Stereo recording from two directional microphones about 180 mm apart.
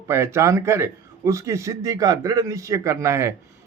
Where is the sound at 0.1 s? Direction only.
15° right (ahead or behind).